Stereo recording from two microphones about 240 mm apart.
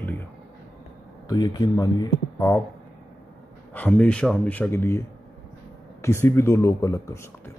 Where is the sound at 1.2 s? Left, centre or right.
Centre.